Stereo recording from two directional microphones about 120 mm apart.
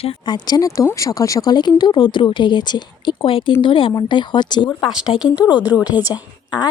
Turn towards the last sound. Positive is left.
turn(degrees=35)  # may be behind; listen again after turning